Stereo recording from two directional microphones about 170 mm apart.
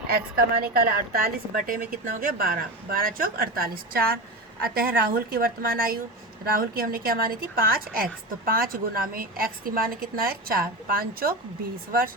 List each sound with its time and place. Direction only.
0.1 s a woman's voice: 60° right (ahead or behind)